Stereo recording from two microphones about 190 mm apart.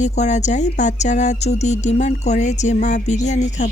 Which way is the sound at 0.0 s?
40° left (ahead or behind).